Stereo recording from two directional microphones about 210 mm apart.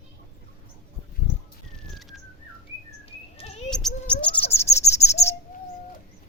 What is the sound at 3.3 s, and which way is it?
Bird, 30° left (ahead or behind).